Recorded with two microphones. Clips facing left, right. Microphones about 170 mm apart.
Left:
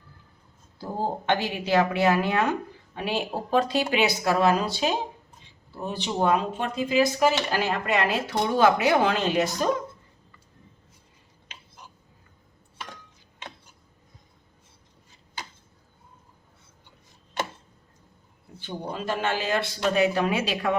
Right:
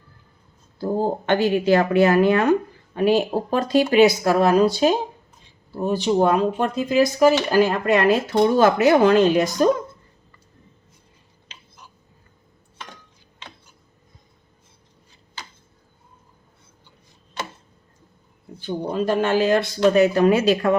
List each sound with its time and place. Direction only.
0.8 s a woman's voice: 50° right (ahead or behind)
18.6 s a woman's voice: 45° right (ahead or behind)